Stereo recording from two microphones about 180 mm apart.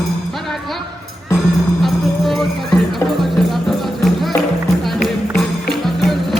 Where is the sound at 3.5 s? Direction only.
Centre (ahead or behind).